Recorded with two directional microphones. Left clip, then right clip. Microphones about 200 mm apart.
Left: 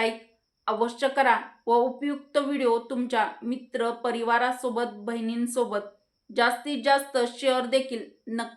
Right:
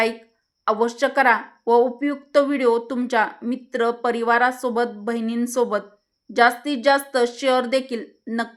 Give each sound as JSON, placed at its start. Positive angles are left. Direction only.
{"t": 0.6, "sound": "speech", "side_deg": -40}